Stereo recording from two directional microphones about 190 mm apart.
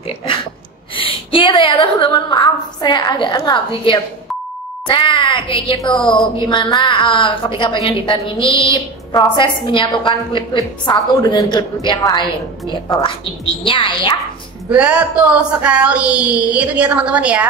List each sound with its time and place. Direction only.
0.9 s a woman's voice: 25° left (ahead or behind)
14.7 s speech: 5° right (ahead or behind)